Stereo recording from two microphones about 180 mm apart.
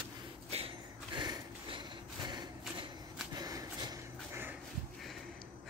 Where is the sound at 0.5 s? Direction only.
30° right (ahead or behind); by 4.6 s 15° right (ahead or behind).